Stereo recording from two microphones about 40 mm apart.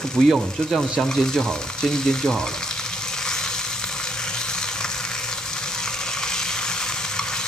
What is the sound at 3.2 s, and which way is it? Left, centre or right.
Frying, centre.